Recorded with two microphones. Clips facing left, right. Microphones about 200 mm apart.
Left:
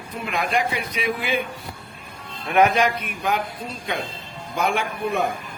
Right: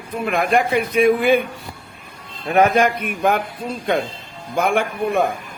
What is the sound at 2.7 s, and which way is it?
Speech, 50° right (ahead or behind).